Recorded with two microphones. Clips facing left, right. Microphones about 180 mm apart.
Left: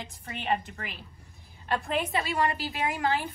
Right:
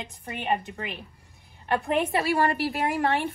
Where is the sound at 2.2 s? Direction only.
65° right (ahead or behind).